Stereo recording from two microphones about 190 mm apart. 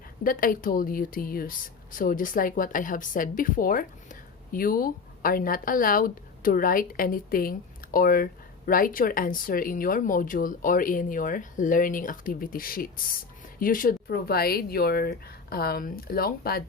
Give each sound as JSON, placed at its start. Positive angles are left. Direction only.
{"t": 0.3, "sound": "a woman's voice", "side_deg": 45}